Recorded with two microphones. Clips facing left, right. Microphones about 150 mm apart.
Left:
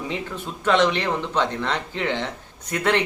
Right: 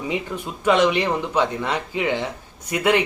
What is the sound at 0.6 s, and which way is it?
Speech, 10° right (ahead or behind).